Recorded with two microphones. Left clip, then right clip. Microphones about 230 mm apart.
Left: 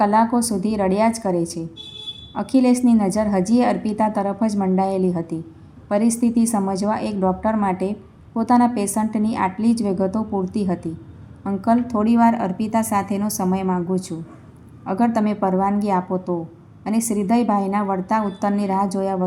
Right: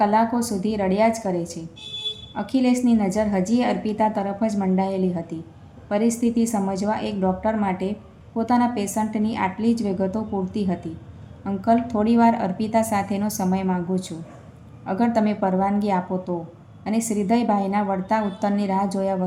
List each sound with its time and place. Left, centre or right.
0.0 s a woman's voice: centre